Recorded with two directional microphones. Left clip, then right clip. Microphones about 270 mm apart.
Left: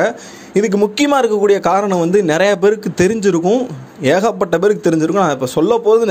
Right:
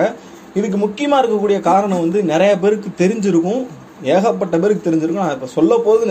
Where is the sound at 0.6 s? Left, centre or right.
Left.